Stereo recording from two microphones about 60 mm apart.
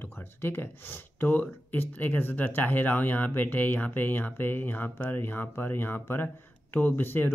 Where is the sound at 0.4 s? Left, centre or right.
Left.